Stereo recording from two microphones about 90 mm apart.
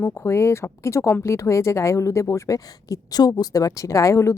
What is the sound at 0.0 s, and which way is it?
Speech, 30° left (ahead or behind).